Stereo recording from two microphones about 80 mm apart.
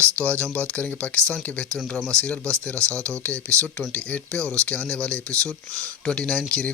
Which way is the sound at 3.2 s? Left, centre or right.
Centre.